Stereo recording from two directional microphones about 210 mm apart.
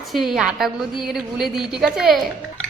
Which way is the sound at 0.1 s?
Centre (ahead or behind).